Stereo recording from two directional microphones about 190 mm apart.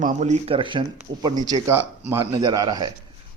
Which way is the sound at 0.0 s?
35° right (ahead or behind).